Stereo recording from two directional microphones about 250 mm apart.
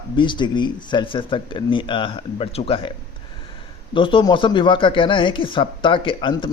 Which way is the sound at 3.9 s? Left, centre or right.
Centre.